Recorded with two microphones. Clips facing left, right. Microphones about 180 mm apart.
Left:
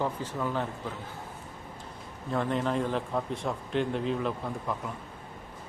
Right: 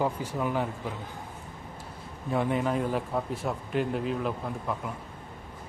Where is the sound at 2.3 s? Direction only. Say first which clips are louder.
Right 2 dB; 10° right (ahead or behind).